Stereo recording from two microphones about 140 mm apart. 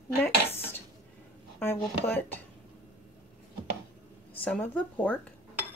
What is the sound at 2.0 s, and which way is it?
Speech, 15° left (ahead or behind).